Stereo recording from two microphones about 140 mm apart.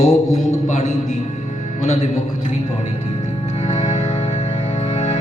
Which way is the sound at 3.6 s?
55° left (ahead or behind).